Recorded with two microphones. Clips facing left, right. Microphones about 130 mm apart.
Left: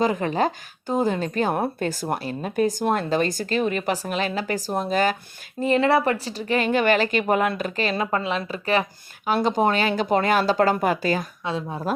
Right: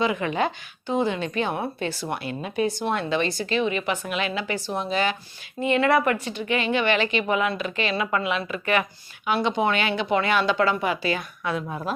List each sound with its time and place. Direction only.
0.0 s speech: 40° left (ahead or behind)
11.4 s speech: 30° left (ahead or behind)